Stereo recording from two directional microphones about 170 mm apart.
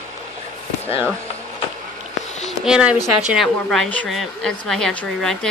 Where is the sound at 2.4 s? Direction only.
5° right (ahead or behind).